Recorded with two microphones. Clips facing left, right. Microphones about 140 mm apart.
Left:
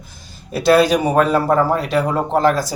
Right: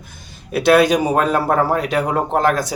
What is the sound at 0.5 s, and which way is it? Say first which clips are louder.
Speech: even; 60° right (ahead or behind).